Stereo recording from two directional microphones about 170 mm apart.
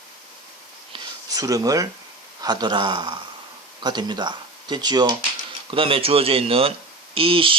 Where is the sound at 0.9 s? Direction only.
20° right (ahead or behind).